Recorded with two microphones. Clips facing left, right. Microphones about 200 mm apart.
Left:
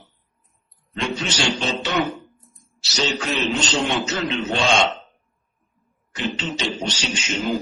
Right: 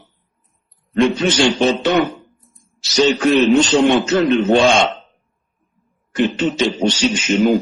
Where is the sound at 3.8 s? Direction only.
55° right (ahead or behind).